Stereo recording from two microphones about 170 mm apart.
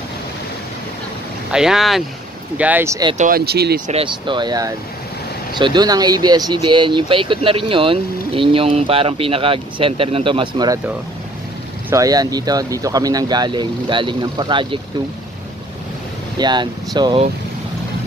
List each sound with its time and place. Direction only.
1.5 s speech: 5° right (ahead or behind)
3.2 s speech: 60° right (ahead or behind)
3.8 s speech: 35° right (ahead or behind)
11.9 s speech: 20° right (ahead or behind)
16.3 s speech: 25° right (ahead or behind)